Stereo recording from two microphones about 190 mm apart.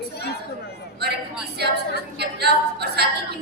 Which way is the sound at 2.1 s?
60° right (ahead or behind).